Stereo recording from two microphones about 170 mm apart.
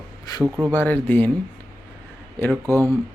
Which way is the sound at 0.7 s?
10° left (ahead or behind).